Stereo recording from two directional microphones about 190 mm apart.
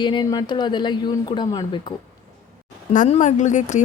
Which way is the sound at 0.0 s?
25° left (ahead or behind).